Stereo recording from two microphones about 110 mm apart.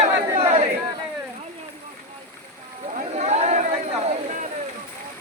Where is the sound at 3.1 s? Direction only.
90° right.